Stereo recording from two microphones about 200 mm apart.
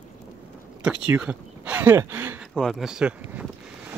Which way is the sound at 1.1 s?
5° right (ahead or behind).